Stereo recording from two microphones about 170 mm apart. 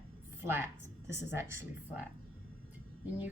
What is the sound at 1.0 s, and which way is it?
Speech, 15° right (ahead or behind).